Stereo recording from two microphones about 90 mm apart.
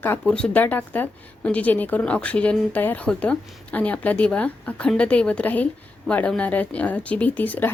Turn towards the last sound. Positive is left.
turn(degrees=20)  # may be behind; listen again after turning